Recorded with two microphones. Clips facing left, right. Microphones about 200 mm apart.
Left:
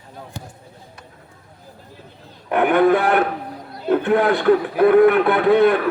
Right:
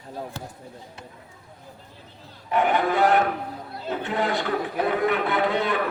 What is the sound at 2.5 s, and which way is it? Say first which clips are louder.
A man's voice: left 7 dB; 55° left (ahead or behind).